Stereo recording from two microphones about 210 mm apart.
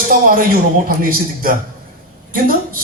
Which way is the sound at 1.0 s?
40° right (ahead or behind).